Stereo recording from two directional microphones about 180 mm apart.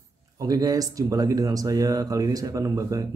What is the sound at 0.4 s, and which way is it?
Speech, 20° right (ahead or behind).